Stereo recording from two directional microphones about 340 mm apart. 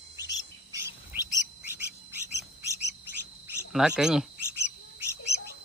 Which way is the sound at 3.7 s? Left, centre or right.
Centre.